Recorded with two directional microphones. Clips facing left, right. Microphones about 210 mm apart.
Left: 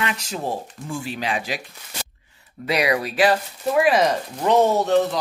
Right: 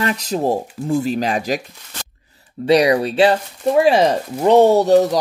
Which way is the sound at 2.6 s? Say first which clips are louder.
Right 8 dB; 30° right (ahead or behind).